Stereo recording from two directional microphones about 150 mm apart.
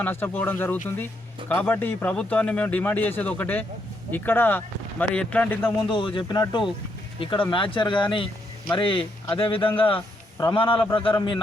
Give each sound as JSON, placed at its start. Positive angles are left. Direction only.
{"t": 0.0, "sound": "a man's voice", "side_deg": 15}
{"t": 5.9, "sound": "speech", "side_deg": 35}